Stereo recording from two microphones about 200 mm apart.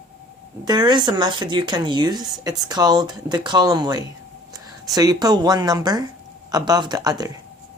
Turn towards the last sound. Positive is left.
turn(degrees=-20)  # may be behind; listen again after turning